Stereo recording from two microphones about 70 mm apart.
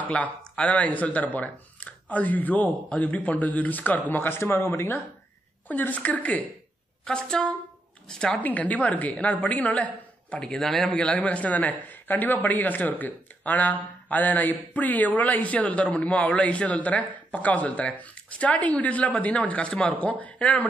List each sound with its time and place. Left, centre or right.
0.4 s speech: centre; by 5.0 s left
5.7 s speech: left
7.1 s a woman's voice: centre
8.4 s speech: left
10.4 s a man's voice: centre
11.0 s speech: centre